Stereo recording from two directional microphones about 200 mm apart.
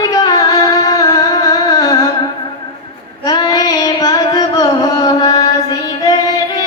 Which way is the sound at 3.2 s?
20° left (ahead or behind).